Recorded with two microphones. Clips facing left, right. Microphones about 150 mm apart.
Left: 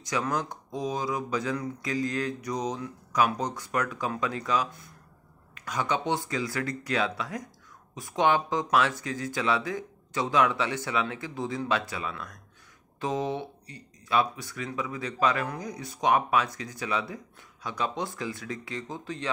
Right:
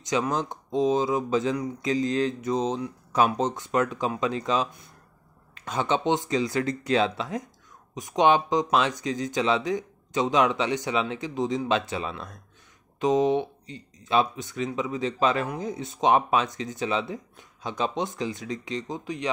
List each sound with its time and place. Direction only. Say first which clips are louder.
0.0 s speech: right 3 dB; 20° right (ahead or behind)